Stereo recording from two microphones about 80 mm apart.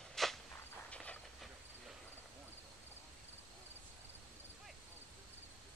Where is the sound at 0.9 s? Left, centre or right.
Centre.